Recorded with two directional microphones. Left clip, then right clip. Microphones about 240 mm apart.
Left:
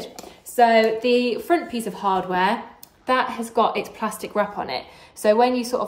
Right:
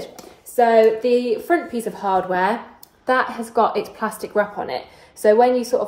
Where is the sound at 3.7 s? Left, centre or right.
Centre.